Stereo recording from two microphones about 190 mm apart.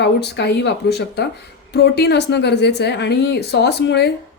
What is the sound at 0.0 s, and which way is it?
A woman's voice, 65° left (ahead or behind).